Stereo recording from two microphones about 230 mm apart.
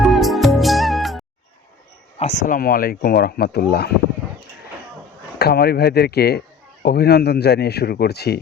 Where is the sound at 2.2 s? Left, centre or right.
Left.